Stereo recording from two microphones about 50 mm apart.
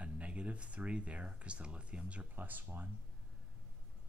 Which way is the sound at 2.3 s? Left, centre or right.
Right.